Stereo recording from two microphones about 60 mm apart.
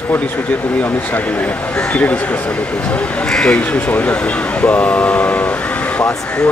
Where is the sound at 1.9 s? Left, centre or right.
Left.